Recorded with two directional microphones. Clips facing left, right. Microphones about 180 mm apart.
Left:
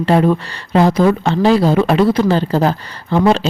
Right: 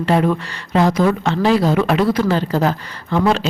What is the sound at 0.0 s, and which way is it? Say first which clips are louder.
Speech: left 3 dB; 30° left (ahead or behind).